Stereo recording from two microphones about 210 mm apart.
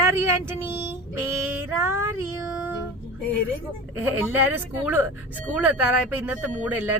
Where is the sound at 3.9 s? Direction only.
10° right (ahead or behind).